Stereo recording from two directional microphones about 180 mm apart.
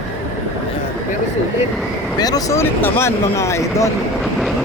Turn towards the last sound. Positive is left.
turn(degrees=15)  # may be behind; listen again after turning